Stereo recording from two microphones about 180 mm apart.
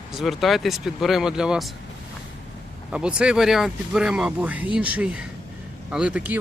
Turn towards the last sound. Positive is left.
turn(degrees=-10)  # may be behind; listen again after turning